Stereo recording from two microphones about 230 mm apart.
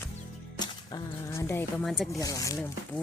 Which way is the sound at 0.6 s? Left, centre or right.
Centre.